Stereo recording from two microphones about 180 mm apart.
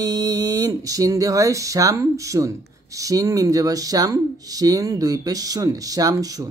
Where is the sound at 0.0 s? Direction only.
20° right (ahead or behind).